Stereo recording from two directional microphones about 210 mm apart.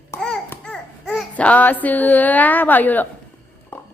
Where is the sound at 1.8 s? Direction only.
10° left (ahead or behind).